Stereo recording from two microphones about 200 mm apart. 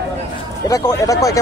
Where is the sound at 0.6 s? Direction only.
15° left (ahead or behind).